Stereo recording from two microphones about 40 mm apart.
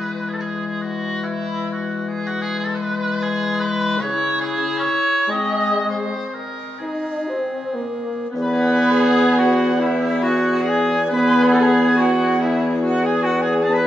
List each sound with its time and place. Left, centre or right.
3.4 s music: centre
8.5 s music: centre